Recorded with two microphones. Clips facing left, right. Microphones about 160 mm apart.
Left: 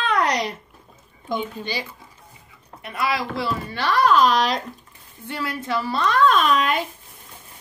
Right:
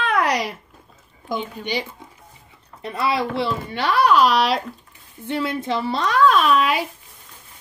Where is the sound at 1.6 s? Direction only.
15° right (ahead or behind).